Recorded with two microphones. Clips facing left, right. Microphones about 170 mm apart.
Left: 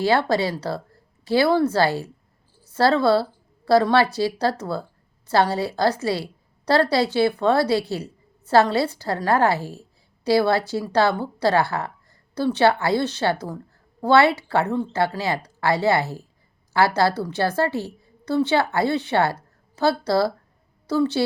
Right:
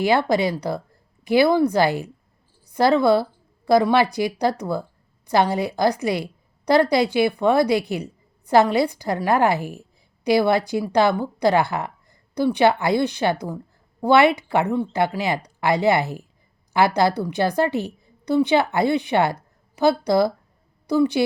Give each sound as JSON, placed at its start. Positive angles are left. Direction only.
{"t": 0.0, "sound": "a woman's voice", "side_deg": -15}